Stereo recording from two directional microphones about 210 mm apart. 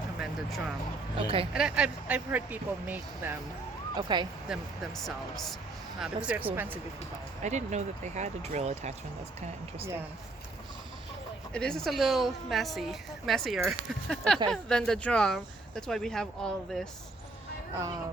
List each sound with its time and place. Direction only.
1.1 s speech: 25° right (ahead or behind)
1.5 s speech: 5° right (ahead or behind)
3.9 s speech: 20° right (ahead or behind)
5.0 s a woman's voice: centre (ahead or behind)
7.4 s speech: 35° right (ahead or behind)
11.5 s a woman's voice: 5° left (ahead or behind)